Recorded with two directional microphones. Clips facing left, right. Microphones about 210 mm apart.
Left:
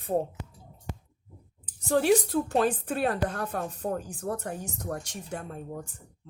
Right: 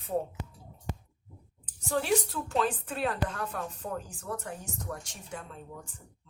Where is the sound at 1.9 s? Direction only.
40° left (ahead or behind).